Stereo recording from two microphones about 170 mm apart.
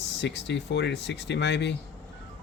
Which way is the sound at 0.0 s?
90° left.